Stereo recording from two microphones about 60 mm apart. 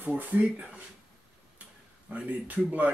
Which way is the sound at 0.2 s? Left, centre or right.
Right.